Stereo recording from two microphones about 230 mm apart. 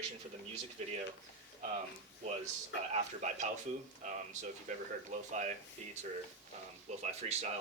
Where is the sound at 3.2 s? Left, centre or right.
Right.